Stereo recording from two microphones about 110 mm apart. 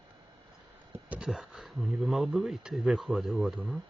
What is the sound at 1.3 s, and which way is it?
Speech, centre (ahead or behind).